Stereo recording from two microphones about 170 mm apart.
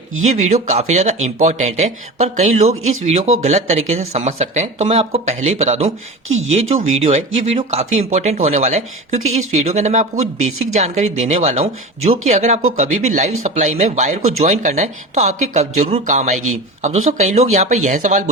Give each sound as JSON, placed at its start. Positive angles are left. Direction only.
{"t": 0.4, "sound": "speech", "side_deg": -40}